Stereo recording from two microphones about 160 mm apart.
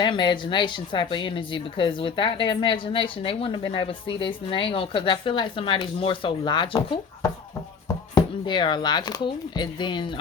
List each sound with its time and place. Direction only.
0.0 s speech: 30° left (ahead or behind)